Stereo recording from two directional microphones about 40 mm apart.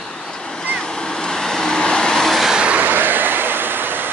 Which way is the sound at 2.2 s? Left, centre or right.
Centre.